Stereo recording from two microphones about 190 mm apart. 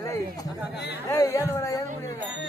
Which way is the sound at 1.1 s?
15° left (ahead or behind).